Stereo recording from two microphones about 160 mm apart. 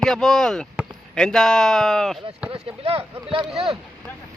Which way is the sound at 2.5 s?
40° right (ahead or behind).